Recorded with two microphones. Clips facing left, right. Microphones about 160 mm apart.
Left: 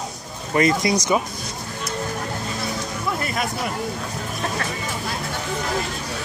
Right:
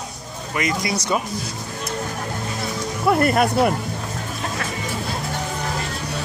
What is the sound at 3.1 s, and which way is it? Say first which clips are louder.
Speech: right 10 dB; 60° right (ahead or behind).